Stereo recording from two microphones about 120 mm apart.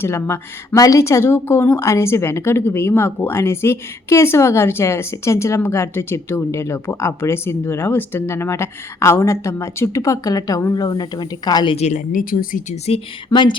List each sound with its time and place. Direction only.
0.0 s a woman's voice: 20° left (ahead or behind); by 11.8 s 40° left (ahead or behind)
11.8 s speech: 80° left
12.9 s speech: 40° left (ahead or behind)